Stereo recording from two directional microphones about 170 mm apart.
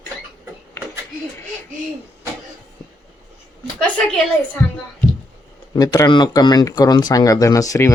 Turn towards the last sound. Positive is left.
turn(degrees=20)  # may be behind; listen again after turning